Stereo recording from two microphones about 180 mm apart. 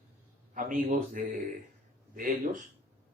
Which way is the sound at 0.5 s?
50° right (ahead or behind).